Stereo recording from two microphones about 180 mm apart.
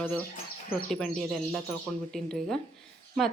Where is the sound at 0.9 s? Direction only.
5° left (ahead or behind).